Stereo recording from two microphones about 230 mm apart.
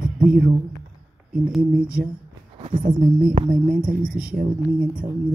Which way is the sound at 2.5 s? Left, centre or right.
Right.